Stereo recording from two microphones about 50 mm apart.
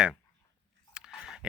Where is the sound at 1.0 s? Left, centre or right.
Centre.